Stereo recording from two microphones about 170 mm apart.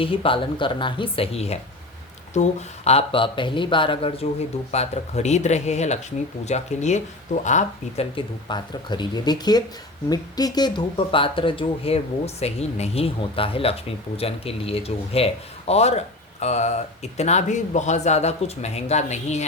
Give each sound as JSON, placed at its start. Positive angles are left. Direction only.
{"t": 0.0, "sound": "speech", "side_deg": 30}
{"t": 8.1, "sound": "speech", "side_deg": 25}